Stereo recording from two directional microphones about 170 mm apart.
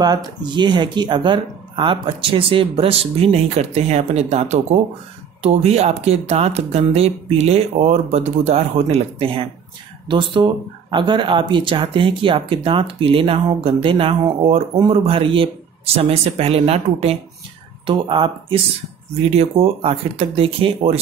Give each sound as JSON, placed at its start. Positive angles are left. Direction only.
{"t": 0.0, "sound": "speech", "side_deg": -25}